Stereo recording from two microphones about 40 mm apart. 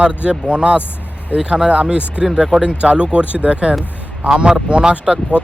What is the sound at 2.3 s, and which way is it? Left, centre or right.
Speech, right.